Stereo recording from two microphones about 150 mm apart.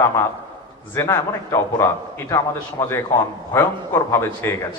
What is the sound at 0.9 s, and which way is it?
A man's voice, 20° left (ahead or behind).